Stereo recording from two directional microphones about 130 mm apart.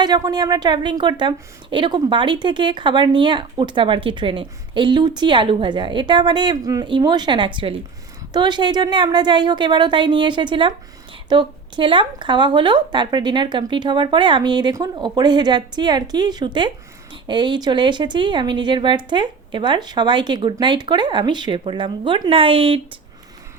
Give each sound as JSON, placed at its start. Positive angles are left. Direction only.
{"t": 0.0, "sound": "speech", "side_deg": -30}